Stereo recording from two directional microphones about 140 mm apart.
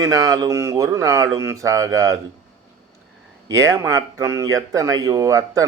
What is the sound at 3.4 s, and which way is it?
Speech, 20° right (ahead or behind).